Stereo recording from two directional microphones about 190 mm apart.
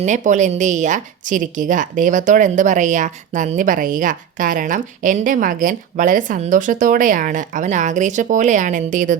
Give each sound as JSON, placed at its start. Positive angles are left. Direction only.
{"t": 0.0, "sound": "a woman's voice", "side_deg": -40}